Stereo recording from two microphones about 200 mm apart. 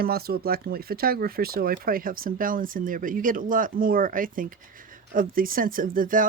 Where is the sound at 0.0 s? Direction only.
50° right (ahead or behind).